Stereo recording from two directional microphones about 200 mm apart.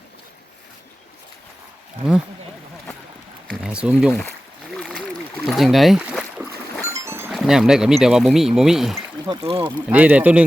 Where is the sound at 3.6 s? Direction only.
5° right (ahead or behind).